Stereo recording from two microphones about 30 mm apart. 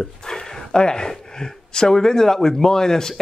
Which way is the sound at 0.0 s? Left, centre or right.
Centre.